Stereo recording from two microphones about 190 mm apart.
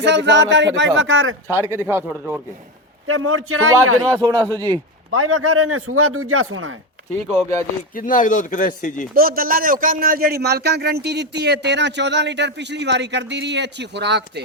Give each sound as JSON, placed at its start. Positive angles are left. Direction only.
{"t": 0.0, "sound": "speech", "side_deg": -70}
{"t": 0.9, "sound": "a man's voice", "side_deg": -90}
{"t": 1.5, "sound": "speech", "side_deg": -15}
{"t": 3.1, "sound": "a man's voice", "side_deg": -90}
{"t": 4.2, "sound": "a man's voice", "side_deg": -20}
{"t": 5.1, "sound": "a man's voice", "side_deg": -90}
{"t": 7.9, "sound": "speech", "side_deg": 45}
{"t": 9.1, "sound": "a man's voice", "side_deg": -50}